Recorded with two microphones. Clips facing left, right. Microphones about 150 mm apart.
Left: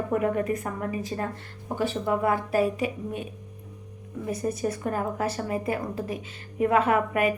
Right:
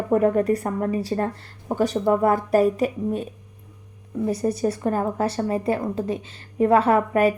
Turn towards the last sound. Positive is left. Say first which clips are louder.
# right 5 dB
turn(degrees=-35)  # may be behind; listen again after turning